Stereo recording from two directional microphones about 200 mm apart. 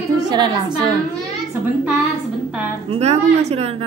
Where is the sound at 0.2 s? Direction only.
20° right (ahead or behind).